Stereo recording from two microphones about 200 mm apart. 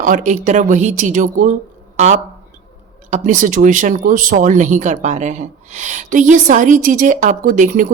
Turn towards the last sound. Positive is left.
turn(degrees=-40)  # may be behind; listen again after turning